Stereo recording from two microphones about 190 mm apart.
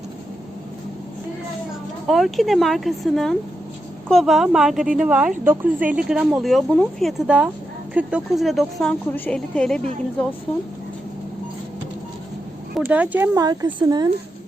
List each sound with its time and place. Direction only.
2.0 s speech: centre (ahead or behind)
12.8 s speech: 10° right (ahead or behind)